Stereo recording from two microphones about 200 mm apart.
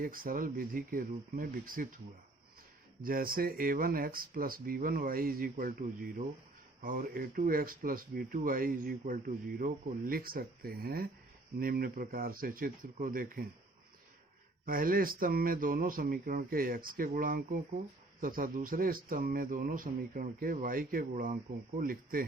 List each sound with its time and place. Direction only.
0.0 s speech: 45° right (ahead or behind)
3.0 s speech: 45° right (ahead or behind)
14.6 s speech: 45° right (ahead or behind)